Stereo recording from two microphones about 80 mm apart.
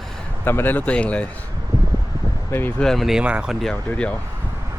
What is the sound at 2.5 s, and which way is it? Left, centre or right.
Speech, left.